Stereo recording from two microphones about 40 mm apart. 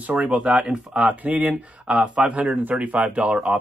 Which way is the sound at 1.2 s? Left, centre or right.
Right.